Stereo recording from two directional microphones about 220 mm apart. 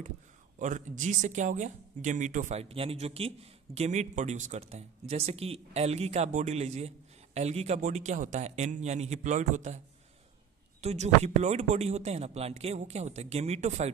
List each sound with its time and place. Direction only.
0.6 s a man's voice: 35° right (ahead or behind)
10.8 s speech: 30° right (ahead or behind)